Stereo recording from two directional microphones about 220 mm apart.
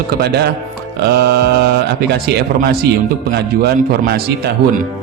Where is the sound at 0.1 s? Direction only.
45° right (ahead or behind).